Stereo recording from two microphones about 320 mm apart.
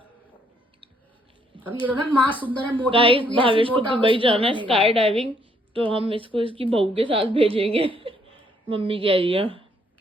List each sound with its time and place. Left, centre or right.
2.0 s speech: centre
2.9 s speech: centre